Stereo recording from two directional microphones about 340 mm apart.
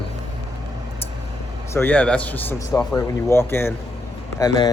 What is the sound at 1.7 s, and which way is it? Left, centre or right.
Speech, centre.